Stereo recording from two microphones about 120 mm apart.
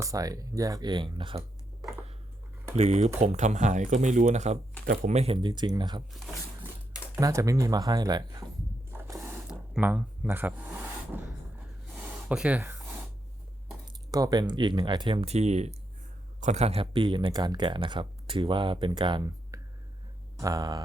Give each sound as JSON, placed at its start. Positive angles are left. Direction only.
{"t": 0.0, "sound": "speech", "side_deg": -30}
{"t": 2.7, "sound": "speech", "side_deg": -65}
{"t": 5.0, "sound": "speech", "side_deg": -60}
{"t": 5.4, "sound": "speech", "side_deg": -40}
{"t": 7.2, "sound": "speech", "side_deg": -30}
{"t": 8.9, "sound": "a sound", "side_deg": -25}
{"t": 10.2, "sound": "speech", "side_deg": -15}
{"t": 11.1, "sound": "a sound", "side_deg": -15}
{"t": 14.1, "sound": "speech", "side_deg": -30}
{"t": 15.2, "sound": "speech", "side_deg": -65}
{"t": 16.9, "sound": "speech", "side_deg": -40}
{"t": 19.5, "sound": "whispering", "side_deg": -30}
{"t": 20.4, "sound": "speech", "side_deg": -30}